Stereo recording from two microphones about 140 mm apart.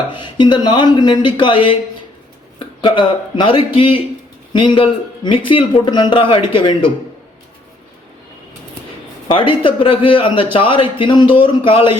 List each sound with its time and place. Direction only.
0.1 s a man's voice: 35° left (ahead or behind)
2.8 s a man's voice: 35° left (ahead or behind)
9.4 s a man's voice: 40° left (ahead or behind)